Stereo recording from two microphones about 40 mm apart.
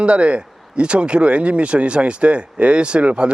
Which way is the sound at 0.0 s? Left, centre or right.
Right.